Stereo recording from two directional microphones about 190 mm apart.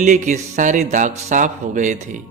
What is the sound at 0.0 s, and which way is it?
A man's voice, 40° right (ahead or behind).